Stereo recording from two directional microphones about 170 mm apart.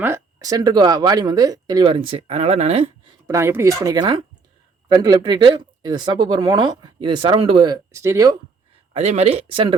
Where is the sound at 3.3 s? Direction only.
15° right (ahead or behind).